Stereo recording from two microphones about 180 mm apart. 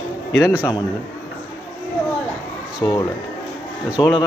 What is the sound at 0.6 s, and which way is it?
Speech, 20° left (ahead or behind).